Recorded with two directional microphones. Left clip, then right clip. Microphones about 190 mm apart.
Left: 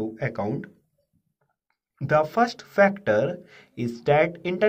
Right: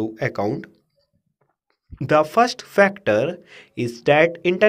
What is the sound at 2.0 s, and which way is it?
Speech, 40° right (ahead or behind).